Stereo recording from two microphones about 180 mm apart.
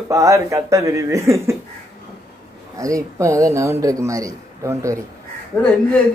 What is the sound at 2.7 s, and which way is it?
A man's voice, 20° right (ahead or behind).